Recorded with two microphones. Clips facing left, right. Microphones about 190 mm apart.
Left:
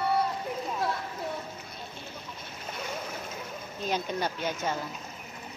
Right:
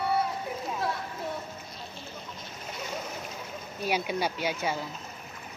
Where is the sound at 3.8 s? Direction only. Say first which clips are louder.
Right 2 dB; 10° right (ahead or behind).